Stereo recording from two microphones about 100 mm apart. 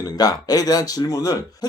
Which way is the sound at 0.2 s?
40° left (ahead or behind).